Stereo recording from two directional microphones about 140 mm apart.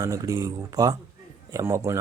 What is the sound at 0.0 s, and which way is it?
Speech, 25° right (ahead or behind).